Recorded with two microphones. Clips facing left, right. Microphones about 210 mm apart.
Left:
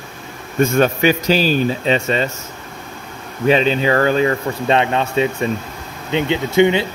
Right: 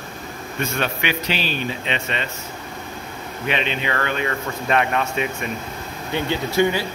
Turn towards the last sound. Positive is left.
turn(degrees=20)  # may be behind; listen again after turning